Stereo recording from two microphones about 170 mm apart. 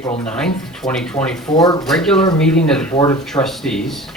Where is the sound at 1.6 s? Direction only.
25° left (ahead or behind).